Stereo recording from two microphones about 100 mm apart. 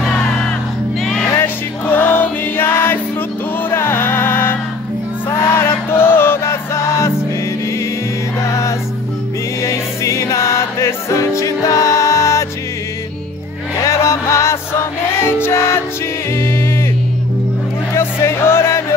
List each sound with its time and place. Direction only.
0.0 s music: 10° left (ahead or behind)
1.3 s music: 20° left (ahead or behind)
8.4 s music: 30° left (ahead or behind)
13.8 s music: 30° left (ahead or behind)
17.9 s music: 25° left (ahead or behind)